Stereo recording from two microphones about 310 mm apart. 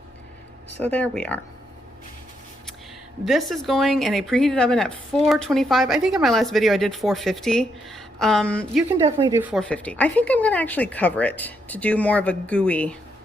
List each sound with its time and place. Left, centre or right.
0.8 s speech: centre
3.2 s speech: centre
9.1 s speech: centre